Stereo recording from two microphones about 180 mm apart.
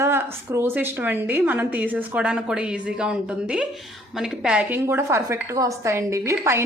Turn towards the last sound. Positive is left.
turn(degrees=-15)  # may be behind; listen again after turning